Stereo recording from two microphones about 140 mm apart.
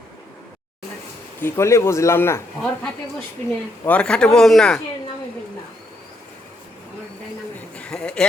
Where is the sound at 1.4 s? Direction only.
20° left (ahead or behind).